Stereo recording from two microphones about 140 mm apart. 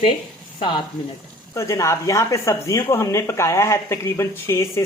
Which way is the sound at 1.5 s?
20° left (ahead or behind).